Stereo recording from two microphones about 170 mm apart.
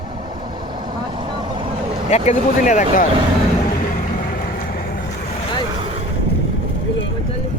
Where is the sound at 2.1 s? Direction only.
45° left (ahead or behind).